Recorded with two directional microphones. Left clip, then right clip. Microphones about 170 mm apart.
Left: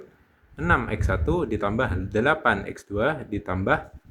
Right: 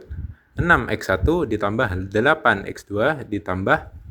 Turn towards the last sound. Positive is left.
turn(degrees=-30)  # may be behind; listen again after turning